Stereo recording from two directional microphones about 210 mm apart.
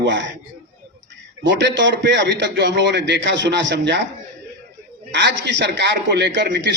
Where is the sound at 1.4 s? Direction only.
60° right (ahead or behind).